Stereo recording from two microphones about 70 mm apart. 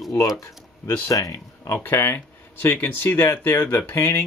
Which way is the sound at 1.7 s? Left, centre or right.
Left.